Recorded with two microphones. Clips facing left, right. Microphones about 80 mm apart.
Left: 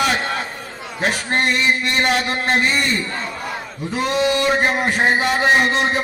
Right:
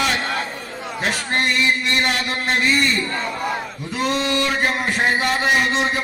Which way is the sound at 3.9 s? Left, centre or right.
Centre.